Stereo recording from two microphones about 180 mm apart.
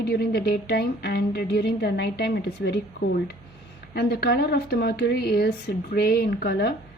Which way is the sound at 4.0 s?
60° left (ahead or behind).